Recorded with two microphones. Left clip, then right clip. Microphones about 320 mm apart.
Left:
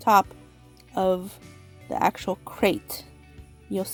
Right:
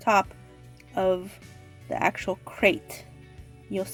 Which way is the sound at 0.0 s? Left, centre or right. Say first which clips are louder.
Left 3 dB; left.